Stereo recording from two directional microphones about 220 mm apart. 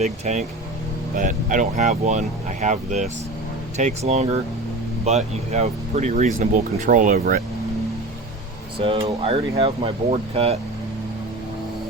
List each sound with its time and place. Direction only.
0.0 s speech: 30° right (ahead or behind)
8.8 s speech: 25° right (ahead or behind)